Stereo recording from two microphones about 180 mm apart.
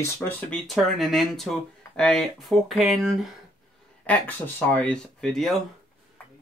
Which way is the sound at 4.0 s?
10° left (ahead or behind).